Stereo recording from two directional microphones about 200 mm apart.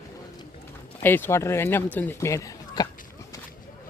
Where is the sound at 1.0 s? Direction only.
10° left (ahead or behind).